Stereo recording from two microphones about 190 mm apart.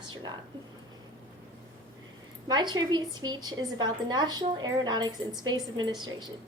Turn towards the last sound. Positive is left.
turn(degrees=-20)  # may be behind; listen again after turning